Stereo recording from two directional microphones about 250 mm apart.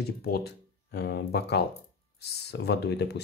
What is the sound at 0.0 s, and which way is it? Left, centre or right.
Speech, left.